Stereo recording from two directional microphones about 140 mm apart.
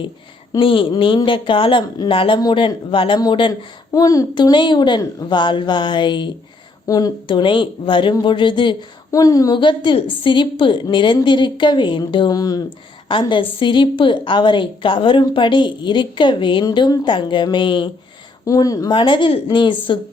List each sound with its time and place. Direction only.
0.6 s a woman's voice: 40° left (ahead or behind)
9.1 s a woman's voice: 25° left (ahead or behind)
13.1 s a woman's voice: 35° left (ahead or behind)
18.4 s a woman's voice: 25° left (ahead or behind)
18.9 s a woman's voice: 35° left (ahead or behind)